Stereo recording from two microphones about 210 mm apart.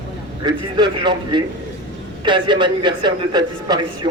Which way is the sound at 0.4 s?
20° right (ahead or behind).